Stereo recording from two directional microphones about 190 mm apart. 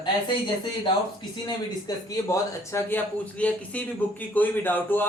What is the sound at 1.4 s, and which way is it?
Speech, 20° left (ahead or behind).